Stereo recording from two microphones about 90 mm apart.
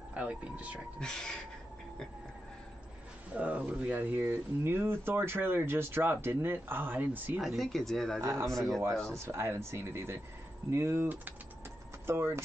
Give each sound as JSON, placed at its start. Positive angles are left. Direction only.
{"t": 0.1, "sound": "speech", "side_deg": -15}
{"t": 0.9, "sound": "speech", "side_deg": 5}
{"t": 3.3, "sound": "speech", "side_deg": -15}
{"t": 7.3, "sound": "speech", "side_deg": 0}
{"t": 8.2, "sound": "speech", "side_deg": -35}
{"t": 12.1, "sound": "speech", "side_deg": -25}